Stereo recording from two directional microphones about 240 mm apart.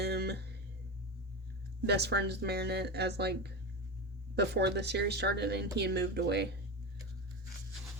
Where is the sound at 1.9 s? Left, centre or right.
Right.